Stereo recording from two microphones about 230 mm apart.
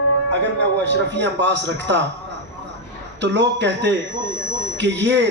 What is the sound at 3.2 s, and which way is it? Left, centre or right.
Speech, right.